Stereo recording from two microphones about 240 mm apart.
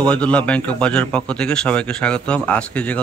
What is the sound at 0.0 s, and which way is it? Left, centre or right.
A man's voice, centre.